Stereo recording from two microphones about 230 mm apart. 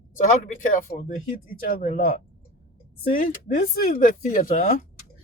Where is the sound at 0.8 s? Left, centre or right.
Left.